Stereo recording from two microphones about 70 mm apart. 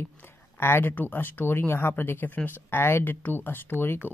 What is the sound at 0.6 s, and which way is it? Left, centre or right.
Speech, left.